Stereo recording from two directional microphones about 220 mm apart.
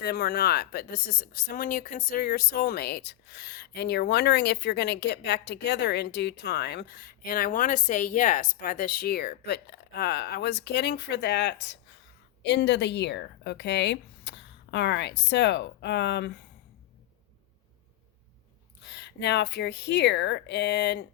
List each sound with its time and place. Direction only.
0.0 s speech: 45° left (ahead or behind)
18.9 s speech: 50° left (ahead or behind)